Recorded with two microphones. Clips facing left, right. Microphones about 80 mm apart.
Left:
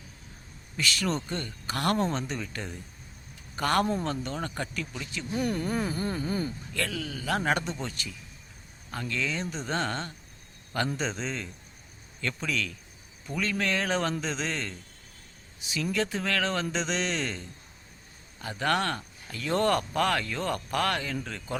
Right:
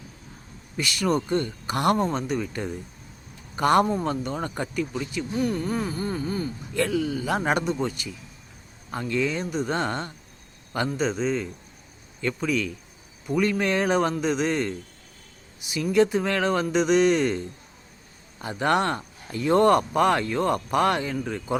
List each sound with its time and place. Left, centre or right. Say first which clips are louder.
0.8 s a man's voice: right 5 dB; centre
6.7 s a man's voice: right 10 dB; centre
10.8 s a man's voice: right 7 dB; centre